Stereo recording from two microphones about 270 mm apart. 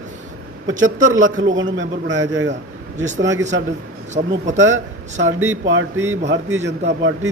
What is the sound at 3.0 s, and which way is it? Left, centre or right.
Speech, right.